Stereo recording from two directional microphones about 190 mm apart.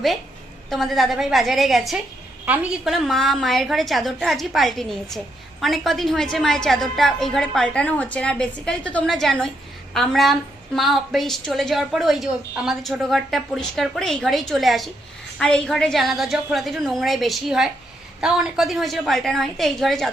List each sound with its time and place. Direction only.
0.7 s a woman's voice: centre (ahead or behind)